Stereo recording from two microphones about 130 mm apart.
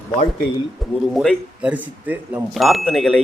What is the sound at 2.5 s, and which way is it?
Speech, centre (ahead or behind).